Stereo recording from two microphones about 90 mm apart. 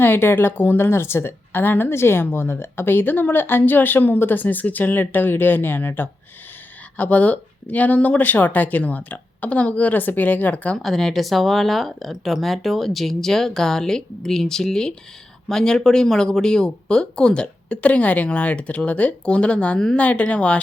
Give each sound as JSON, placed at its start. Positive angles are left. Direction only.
{"t": 0.0, "sound": "a woman's voice", "side_deg": 25}
{"t": 10.8, "sound": "speech", "side_deg": 0}